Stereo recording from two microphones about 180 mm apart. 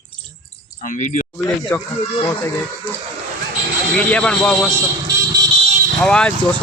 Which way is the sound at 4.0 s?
5° left (ahead or behind).